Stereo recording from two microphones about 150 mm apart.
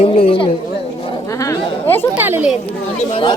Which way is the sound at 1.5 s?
15° left (ahead or behind).